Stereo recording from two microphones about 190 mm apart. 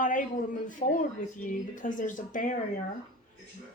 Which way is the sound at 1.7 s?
45° left (ahead or behind).